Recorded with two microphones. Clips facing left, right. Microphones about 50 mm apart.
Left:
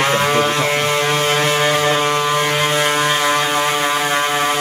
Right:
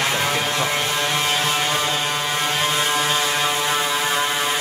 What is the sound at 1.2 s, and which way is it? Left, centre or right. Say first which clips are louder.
Music: left 5 dB; left.